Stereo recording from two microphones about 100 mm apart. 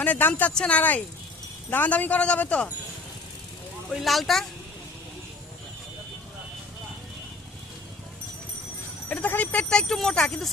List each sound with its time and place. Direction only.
0.0 s speech: 15° left (ahead or behind)
3.9 s speech: centre (ahead or behind)
9.0 s speech: 15° left (ahead or behind)